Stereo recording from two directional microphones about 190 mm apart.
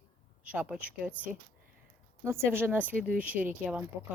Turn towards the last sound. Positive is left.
turn(degrees=-10)  # may be behind; listen again after turning